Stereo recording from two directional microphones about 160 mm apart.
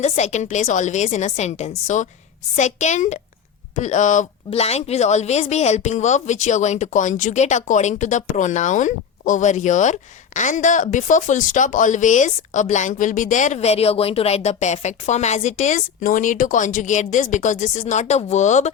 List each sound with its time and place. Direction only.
0.0 s speech: 45° left (ahead or behind)